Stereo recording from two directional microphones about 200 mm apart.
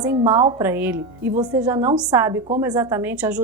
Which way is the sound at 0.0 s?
20° right (ahead or behind).